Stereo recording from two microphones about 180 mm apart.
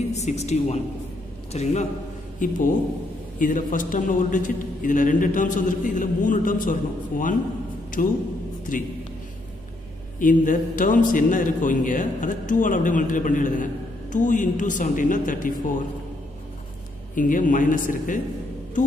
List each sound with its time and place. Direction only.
0.1 s a woman's voice: 40° left (ahead or behind)
10.1 s a man's voice: 45° left (ahead or behind)
17.1 s a man's voice: 50° left (ahead or behind)